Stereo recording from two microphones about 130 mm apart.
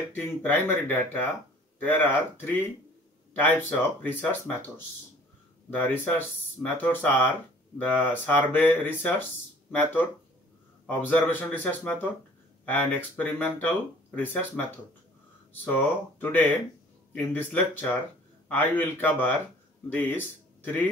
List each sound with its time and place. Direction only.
0.1 s speech: 15° left (ahead or behind)
15.6 s speech: 15° left (ahead or behind)